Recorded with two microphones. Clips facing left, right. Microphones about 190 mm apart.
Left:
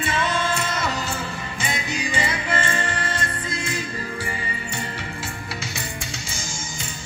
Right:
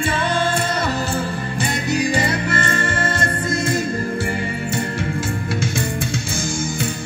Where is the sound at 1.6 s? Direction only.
60° right (ahead or behind).